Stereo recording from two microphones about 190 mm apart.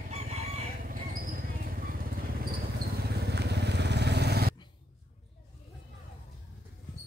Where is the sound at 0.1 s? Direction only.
35° right (ahead or behind).